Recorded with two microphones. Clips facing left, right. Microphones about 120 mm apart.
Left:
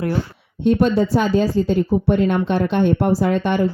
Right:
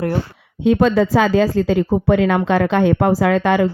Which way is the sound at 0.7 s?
90° right.